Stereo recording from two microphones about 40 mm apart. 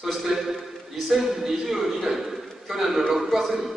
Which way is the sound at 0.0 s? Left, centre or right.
Centre.